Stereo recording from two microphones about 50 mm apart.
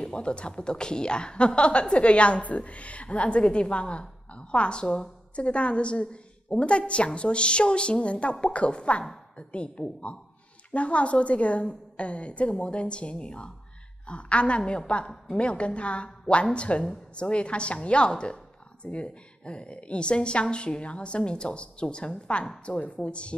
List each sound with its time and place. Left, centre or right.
0.0 s a woman's voice: centre